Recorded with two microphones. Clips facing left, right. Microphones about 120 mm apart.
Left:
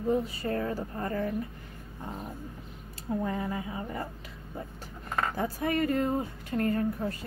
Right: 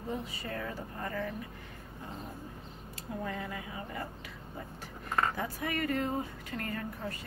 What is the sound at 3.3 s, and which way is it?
Speech, 30° left (ahead or behind).